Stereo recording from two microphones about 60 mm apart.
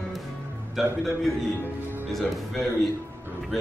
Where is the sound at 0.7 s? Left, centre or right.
Centre.